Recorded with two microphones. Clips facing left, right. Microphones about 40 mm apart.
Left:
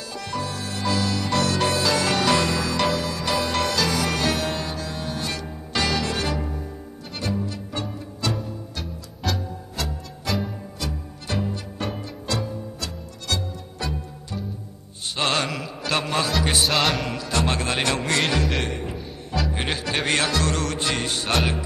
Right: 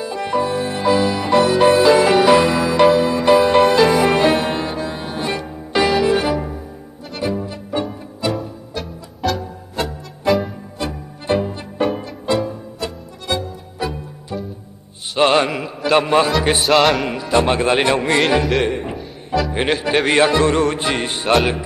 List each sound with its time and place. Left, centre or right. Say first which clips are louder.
0.0 s music: right 10 dB; right; by 9.4 s centre
9.8 s music: right 8 dB; right
11.9 s music: right 8 dB; centre
12.4 s music: right 6 dB; right
15.1 s mantra: right 9 dB; right
16.6 s music: right 10 dB; centre
17.0 s music: right 8 dB; right
18.6 s a man's voice: right 8 dB; right
18.9 s music: right 7 dB; centre
20.1 s music: right 9 dB; right